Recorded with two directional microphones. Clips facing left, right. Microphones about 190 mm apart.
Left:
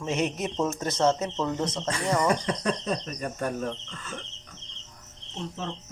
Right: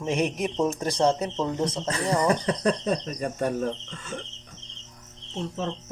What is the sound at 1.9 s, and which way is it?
Speech, 35° right (ahead or behind).